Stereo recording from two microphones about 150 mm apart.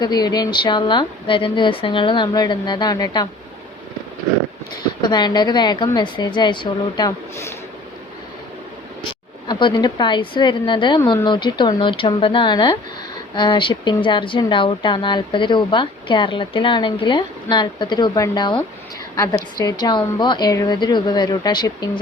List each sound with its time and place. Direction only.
0.0 s speech: 25° left (ahead or behind)
5.0 s a woman's voice: 30° left (ahead or behind)
9.0 s a woman's voice: 30° left (ahead or behind)